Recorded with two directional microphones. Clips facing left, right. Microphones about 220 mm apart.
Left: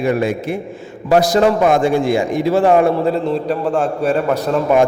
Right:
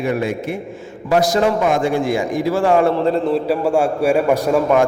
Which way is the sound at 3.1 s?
Centre (ahead or behind).